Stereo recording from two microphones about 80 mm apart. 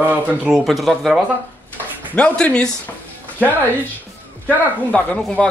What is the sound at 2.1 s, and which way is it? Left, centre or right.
Speech, centre.